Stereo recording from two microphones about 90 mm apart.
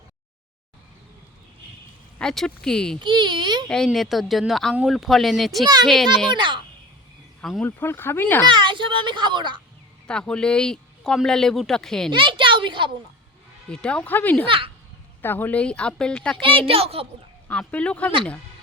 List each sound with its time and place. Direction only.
2.1 s speech: 5° left (ahead or behind)
3.0 s a child's voice: 60° right (ahead or behind)
3.7 s speech: 5° left (ahead or behind)
6.3 s a child's voice: 60° right (ahead or behind)
7.6 s speech: 25° left (ahead or behind)
8.4 s a child's voice: 60° right (ahead or behind)
10.1 s speech: 10° left (ahead or behind)
12.1 s a woman's voice: 65° right (ahead or behind)
13.7 s speech: 10° left (ahead or behind)
16.4 s a woman's voice: 80° right
17.5 s speech: 15° left (ahead or behind)